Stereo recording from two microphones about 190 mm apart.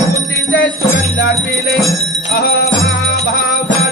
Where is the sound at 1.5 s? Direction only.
55° left (ahead or behind).